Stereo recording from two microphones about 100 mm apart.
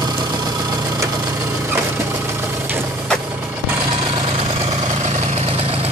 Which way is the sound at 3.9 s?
65° right (ahead or behind).